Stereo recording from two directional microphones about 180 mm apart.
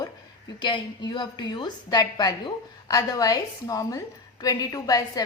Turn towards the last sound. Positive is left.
turn(degrees=20)  # may be behind; listen again after turning